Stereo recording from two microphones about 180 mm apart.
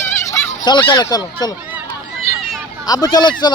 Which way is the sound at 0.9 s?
20° left (ahead or behind).